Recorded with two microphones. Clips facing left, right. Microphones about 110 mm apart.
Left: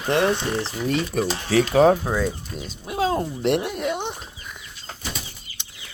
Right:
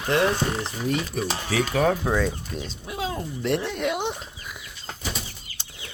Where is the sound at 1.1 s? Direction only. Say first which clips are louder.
Left 5 dB; 55° left (ahead or behind).